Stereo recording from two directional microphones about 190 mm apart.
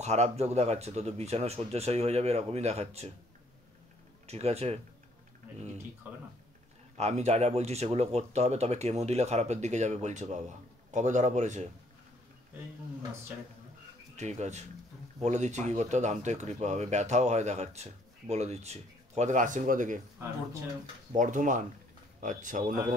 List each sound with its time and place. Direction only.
0.0 s speech: 35° right (ahead or behind)
4.3 s speech: 35° right (ahead or behind)
7.0 s speech: 35° right (ahead or behind)
14.1 s speech: 35° right (ahead or behind)
21.1 s speech: 40° right (ahead or behind)